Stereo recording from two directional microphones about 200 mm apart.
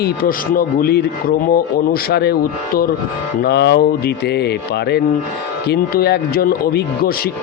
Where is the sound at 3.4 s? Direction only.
55° left (ahead or behind).